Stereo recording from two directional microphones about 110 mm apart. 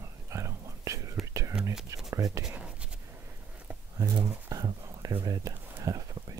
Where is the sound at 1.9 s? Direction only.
30° right (ahead or behind).